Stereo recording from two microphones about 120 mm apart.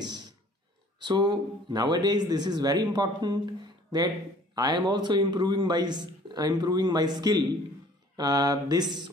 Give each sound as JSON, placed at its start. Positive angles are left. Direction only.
{"t": 0.0, "sound": "beatboxing", "side_deg": -35}
{"t": 0.9, "sound": "speech", "side_deg": -40}